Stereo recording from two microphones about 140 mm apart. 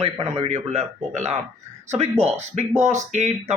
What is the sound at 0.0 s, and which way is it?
Speech, 50° right (ahead or behind).